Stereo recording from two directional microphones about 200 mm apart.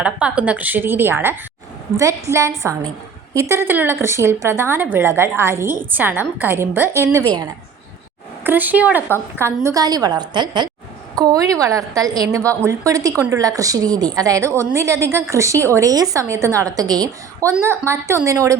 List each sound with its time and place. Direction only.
0.0 s a woman's voice: 5° right (ahead or behind)
8.4 s a woman's voice: 10° right (ahead or behind)